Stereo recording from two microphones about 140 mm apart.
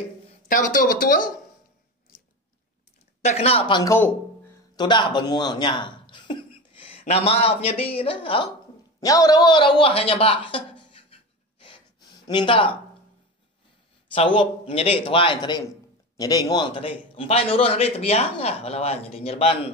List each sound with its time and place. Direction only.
0.5 s speech: 75° left (ahead or behind)
3.3 s a man's voice: 45° left (ahead or behind)
3.8 s a sound: 20° left (ahead or behind)
4.7 s speech: 30° left (ahead or behind)
9.0 s a man's voice: 25° left (ahead or behind)
11.6 s gasp: 35° left (ahead or behind)
14.1 s a man's voice: 40° left (ahead or behind)